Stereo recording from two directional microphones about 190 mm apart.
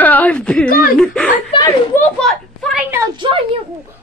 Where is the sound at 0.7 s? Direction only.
50° left (ahead or behind).